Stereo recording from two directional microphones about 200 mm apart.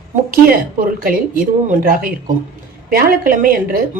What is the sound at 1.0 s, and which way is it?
A woman's voice, 45° right (ahead or behind).